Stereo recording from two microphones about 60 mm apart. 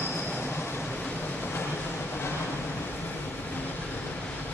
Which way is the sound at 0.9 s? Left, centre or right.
Left.